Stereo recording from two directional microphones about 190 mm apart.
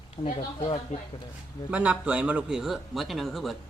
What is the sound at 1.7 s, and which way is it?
A man's voice, 5° right (ahead or behind).